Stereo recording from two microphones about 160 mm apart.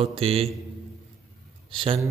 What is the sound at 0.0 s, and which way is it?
Speech, 40° right (ahead or behind).